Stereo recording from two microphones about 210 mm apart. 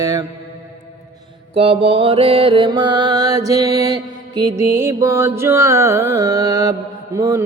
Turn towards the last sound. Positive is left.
turn(degrees=-15)  # may be behind; listen again after turning